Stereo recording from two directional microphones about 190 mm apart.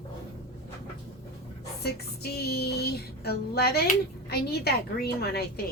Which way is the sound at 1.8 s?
55° left (ahead or behind).